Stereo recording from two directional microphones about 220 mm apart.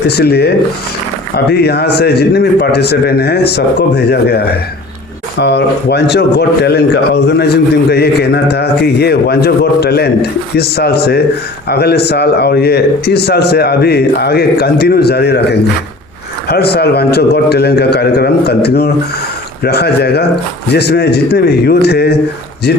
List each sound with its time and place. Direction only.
0.1 s a man's voice: 45° left (ahead or behind)
16.5 s a man's voice: 45° left (ahead or behind)